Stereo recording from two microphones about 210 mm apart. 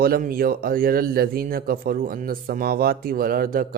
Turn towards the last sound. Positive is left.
turn(degrees=-40)  # may be behind; listen again after turning